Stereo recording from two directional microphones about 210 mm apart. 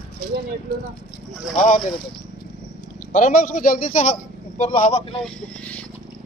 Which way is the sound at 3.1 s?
40° left (ahead or behind).